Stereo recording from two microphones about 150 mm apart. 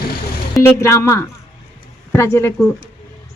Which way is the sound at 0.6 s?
15° left (ahead or behind).